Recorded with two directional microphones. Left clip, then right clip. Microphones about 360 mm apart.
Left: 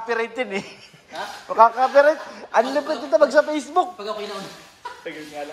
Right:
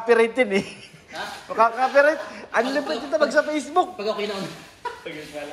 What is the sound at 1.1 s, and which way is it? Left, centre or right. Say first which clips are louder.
A man's voice: left 2 dB; centre.